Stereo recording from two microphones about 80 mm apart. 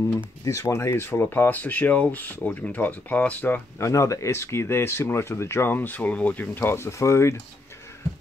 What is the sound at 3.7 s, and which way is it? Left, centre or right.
Speech, left.